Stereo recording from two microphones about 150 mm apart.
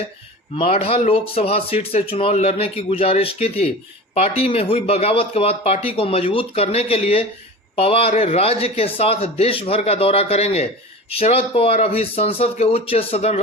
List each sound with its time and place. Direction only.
0.5 s speech: 40° left (ahead or behind)